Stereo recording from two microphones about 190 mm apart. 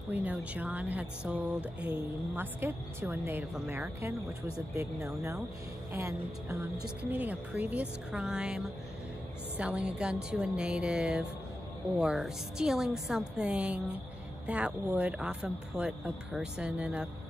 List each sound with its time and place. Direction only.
0.1 s a woman's voice: 10° right (ahead or behind)
1.8 s speech: 60° right (ahead or behind)
2.3 s a woman's voice: 10° right (ahead or behind)